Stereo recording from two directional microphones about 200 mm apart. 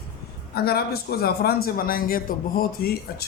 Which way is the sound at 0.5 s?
50° left (ahead or behind).